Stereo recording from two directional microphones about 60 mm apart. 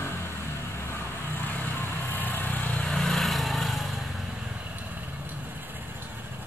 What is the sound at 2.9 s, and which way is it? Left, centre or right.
Vehicle, centre.